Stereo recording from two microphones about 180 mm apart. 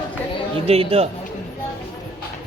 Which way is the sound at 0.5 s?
30° right (ahead or behind).